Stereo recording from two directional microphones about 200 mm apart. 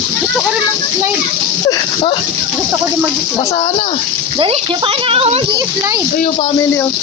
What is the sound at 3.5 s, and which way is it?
Speech, 30° left (ahead or behind).